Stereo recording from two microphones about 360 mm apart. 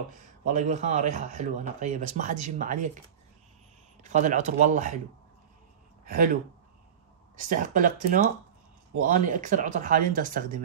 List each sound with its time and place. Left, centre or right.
0.5 s a man's voice: centre
4.0 s a man's voice: centre
6.0 s speech: right
7.3 s a man's voice: right